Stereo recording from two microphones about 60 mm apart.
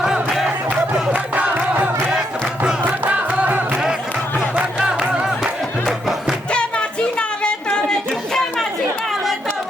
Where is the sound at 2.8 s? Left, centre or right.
Right.